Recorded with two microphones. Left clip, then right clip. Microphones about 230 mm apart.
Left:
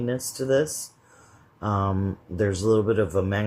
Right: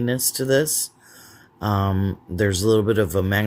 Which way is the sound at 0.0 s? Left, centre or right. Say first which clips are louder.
Right 4 dB; right.